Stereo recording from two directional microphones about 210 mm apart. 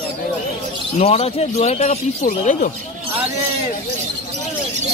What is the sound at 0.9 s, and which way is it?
Speech, 30° left (ahead or behind).